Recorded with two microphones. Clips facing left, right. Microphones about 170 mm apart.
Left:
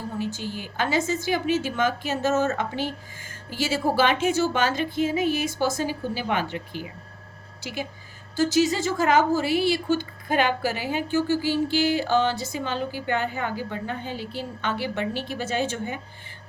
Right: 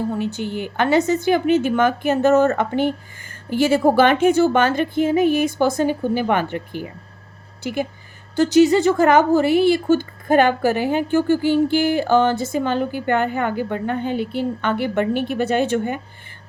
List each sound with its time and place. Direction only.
0.2 s a woman's voice: 65° right (ahead or behind)